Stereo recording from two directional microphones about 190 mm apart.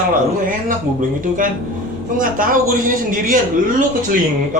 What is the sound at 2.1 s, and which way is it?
Speech, 45° right (ahead or behind).